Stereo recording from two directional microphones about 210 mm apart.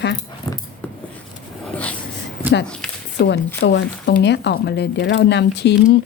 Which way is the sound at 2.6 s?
5° left (ahead or behind).